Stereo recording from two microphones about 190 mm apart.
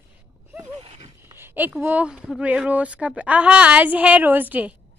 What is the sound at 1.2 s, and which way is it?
Speech, 10° right (ahead or behind).